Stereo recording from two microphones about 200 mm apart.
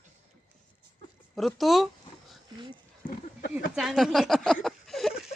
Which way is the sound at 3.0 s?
40° left (ahead or behind).